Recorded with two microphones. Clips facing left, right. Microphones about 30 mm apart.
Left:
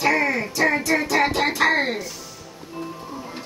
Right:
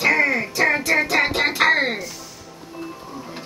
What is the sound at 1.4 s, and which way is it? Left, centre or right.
Speech, right.